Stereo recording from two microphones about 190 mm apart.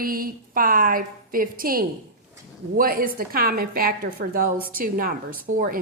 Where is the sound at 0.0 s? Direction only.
50° right (ahead or behind).